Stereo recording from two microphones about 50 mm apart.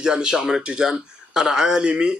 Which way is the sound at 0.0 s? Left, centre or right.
Centre.